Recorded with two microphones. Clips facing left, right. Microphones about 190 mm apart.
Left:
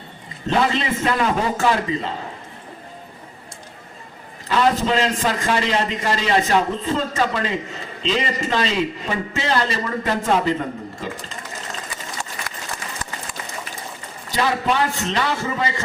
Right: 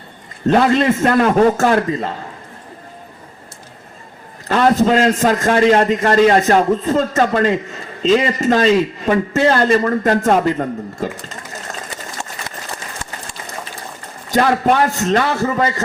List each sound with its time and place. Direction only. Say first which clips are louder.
0.4 s a man's voice: right 7 dB; 50° right (ahead or behind)
4.4 s a man's voice: right 5 dB; 50° right (ahead or behind)
14.3 s a man's voice: right 6 dB; 50° right (ahead or behind)